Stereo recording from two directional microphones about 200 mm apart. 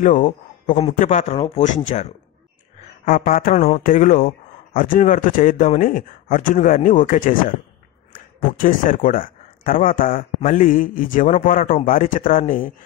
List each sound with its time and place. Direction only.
0.0 s speech: 40° left (ahead or behind)
3.1 s speech: 45° left (ahead or behind)